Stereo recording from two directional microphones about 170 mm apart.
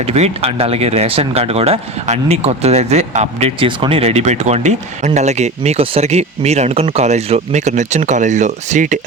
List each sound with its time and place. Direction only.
0.0 s speech: 35° right (ahead or behind)